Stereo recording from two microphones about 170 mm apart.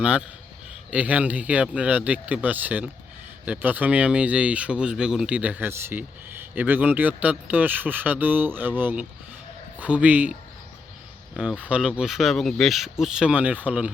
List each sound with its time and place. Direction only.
0.0 s speech: 5° right (ahead or behind)
11.3 s speech: 5° right (ahead or behind)